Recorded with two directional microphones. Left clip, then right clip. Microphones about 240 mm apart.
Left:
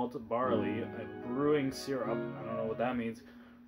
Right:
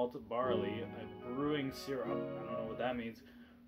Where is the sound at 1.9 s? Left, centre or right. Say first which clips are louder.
Left 2 dB; centre.